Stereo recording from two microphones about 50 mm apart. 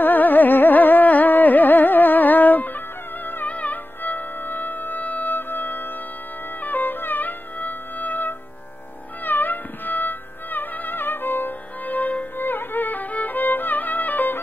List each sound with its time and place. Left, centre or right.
0.0 s music: left
12.4 s music: left